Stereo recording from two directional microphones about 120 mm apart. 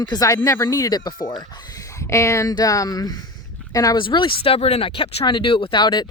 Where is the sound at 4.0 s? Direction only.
45° left (ahead or behind).